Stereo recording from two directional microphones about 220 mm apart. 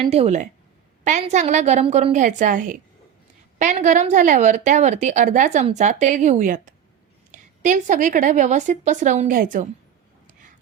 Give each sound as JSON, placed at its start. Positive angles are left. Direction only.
{"t": 0.1, "sound": "speech", "side_deg": -30}